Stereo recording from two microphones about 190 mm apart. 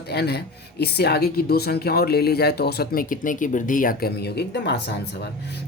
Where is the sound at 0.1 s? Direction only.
60° left (ahead or behind).